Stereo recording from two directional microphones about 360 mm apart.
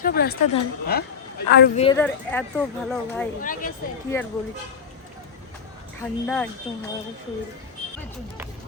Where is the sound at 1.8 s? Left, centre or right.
Centre.